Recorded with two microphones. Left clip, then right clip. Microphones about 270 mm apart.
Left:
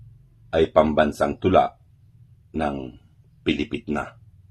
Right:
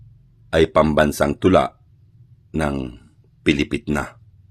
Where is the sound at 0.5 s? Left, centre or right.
Right.